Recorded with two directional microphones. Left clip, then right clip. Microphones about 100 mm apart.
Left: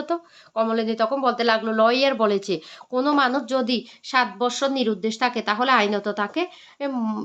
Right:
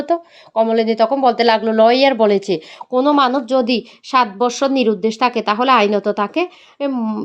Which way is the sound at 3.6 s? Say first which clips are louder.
Right 6 dB; 45° right (ahead or behind).